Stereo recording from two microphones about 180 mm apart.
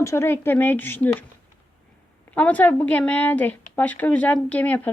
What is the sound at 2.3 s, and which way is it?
Speech, 10° left (ahead or behind).